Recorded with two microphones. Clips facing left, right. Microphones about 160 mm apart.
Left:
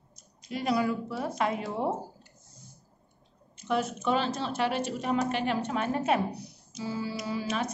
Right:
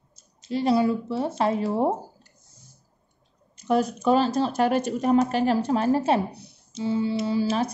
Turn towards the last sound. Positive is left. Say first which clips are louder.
# right 8 dB
turn(degrees=-30)  # may be behind; listen again after turning